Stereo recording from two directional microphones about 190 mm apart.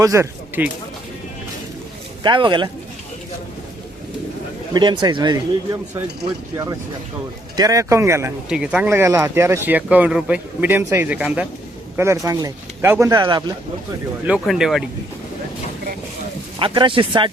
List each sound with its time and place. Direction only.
0.0 s speech: 15° right (ahead or behind)
2.2 s speech: 25° right (ahead or behind)
4.7 s speech: 25° right (ahead or behind)
7.5 s speech: 20° right (ahead or behind)
14.3 s speech: 5° right (ahead or behind)
16.6 s speech: 25° right (ahead or behind)